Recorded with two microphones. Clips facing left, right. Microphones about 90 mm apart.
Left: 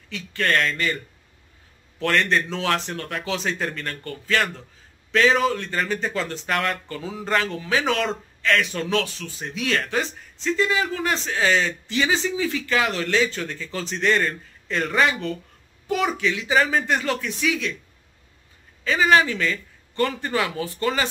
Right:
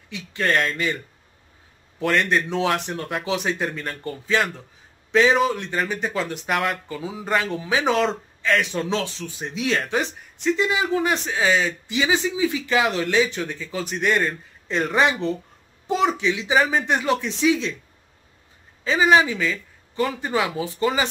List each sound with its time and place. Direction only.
0.1 s speech: 15° right (ahead or behind)
2.0 s speech: 10° right (ahead or behind)
16.5 s speech: 5° right (ahead or behind)
16.8 s speech: 20° right (ahead or behind)
18.9 s speech: 10° right (ahead or behind)